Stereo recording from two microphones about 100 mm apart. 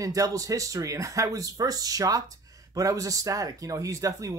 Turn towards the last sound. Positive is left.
turn(degrees=-35)  # may be behind; listen again after turning